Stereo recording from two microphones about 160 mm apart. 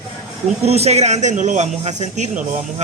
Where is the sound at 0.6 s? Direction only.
40° right (ahead or behind).